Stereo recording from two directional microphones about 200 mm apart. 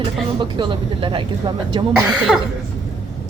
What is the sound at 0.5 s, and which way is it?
Speech, 25° right (ahead or behind).